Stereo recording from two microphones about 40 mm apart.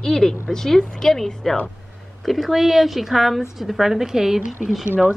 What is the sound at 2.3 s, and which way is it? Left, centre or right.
A woman's voice, centre.